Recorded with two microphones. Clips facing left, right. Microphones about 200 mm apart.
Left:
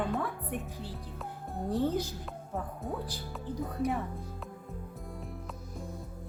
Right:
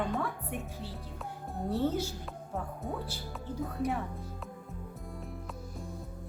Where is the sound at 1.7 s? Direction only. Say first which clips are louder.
Left 1 dB; 15° left (ahead or behind).